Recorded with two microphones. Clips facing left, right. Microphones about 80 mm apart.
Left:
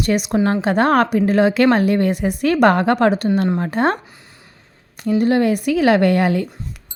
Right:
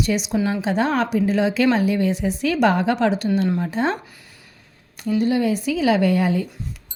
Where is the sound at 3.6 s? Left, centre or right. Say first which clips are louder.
Left 4 dB; left.